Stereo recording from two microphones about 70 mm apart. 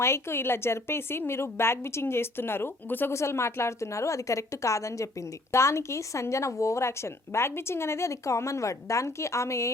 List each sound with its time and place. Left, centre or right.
0.0 s a woman's voice: left